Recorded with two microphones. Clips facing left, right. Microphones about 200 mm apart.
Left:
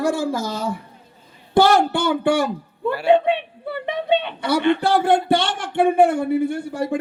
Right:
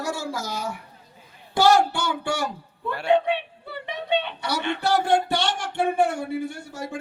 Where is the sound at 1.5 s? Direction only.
55° left (ahead or behind).